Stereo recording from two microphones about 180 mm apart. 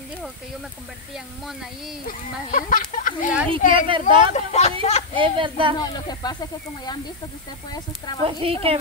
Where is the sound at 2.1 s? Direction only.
45° left (ahead or behind).